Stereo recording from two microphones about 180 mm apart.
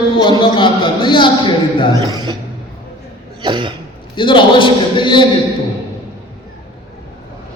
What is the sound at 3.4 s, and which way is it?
Throat clearing, 25° right (ahead or behind).